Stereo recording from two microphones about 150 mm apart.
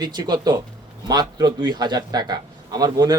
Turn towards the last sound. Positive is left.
turn(degrees=-25)  # may be behind; listen again after turning